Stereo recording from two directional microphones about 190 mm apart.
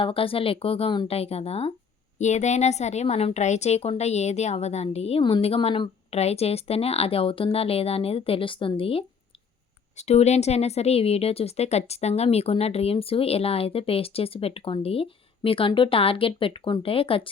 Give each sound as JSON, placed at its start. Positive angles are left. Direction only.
{"t": 0.0, "sound": "speech", "side_deg": 30}